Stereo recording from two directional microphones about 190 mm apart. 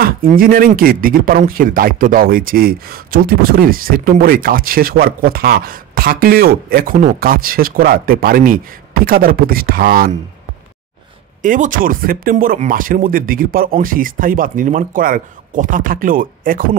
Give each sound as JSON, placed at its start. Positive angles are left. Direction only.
{"t": 0.0, "sound": "speech", "side_deg": -50}
{"t": 11.4, "sound": "speech", "side_deg": -45}